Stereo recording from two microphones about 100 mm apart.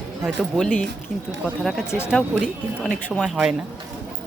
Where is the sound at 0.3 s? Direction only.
10° left (ahead or behind).